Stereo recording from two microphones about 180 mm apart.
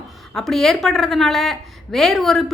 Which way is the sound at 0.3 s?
Centre (ahead or behind).